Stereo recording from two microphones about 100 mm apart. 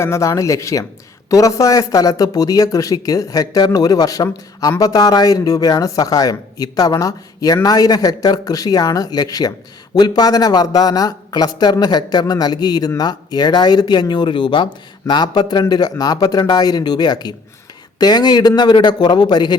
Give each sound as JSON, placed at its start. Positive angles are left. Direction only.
{"t": 0.0, "sound": "speech", "side_deg": 30}